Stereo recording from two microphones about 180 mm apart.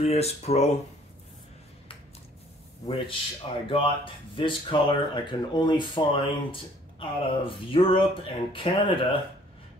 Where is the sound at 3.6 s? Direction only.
30° left (ahead or behind).